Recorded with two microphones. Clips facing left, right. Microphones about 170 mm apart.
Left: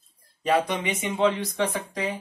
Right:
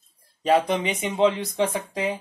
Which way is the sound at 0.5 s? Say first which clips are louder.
Right 3 dB; 20° right (ahead or behind).